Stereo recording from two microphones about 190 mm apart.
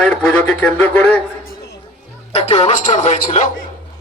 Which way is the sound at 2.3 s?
35° left (ahead or behind).